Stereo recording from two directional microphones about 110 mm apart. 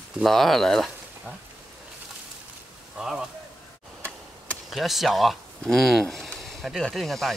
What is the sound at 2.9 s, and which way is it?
Speech, 5° right (ahead or behind).